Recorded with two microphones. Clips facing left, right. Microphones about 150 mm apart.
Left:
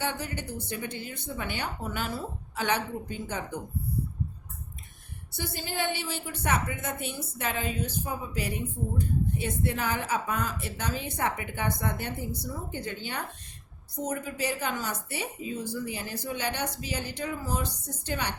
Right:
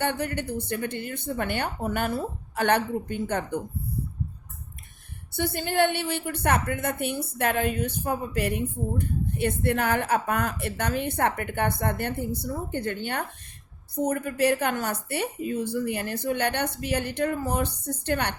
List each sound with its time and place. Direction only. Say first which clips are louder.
0.0 s a woman's voice: right 5 dB; 60° right (ahead or behind)
5.3 s a woman's voice: right 8 dB; 60° right (ahead or behind)